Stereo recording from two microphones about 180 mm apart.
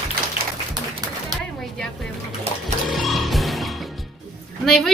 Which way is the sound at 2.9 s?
Centre (ahead or behind).